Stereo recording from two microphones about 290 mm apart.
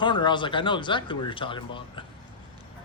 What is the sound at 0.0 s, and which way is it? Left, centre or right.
Speech, centre.